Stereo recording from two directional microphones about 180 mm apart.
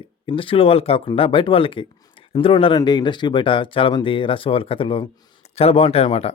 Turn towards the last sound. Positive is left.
turn(degrees=35)  # may be behind; listen again after turning